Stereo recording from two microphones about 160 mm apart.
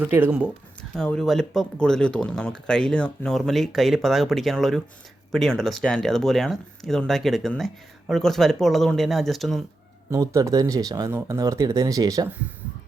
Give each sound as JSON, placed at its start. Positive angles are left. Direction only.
{"t": 0.0, "sound": "speech", "side_deg": -10}
{"t": 0.9, "sound": "speech", "side_deg": 5}
{"t": 10.1, "sound": "speech", "side_deg": -20}